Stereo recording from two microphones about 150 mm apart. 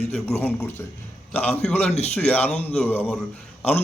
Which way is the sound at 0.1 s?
10° left (ahead or behind).